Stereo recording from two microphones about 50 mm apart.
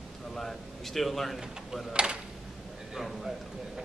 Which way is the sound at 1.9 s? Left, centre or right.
Centre.